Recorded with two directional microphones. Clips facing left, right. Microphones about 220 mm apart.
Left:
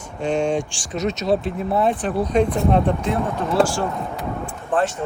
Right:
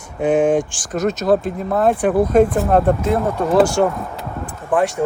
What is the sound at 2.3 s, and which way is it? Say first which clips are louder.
Speech: right 1 dB; 5° right (ahead or behind).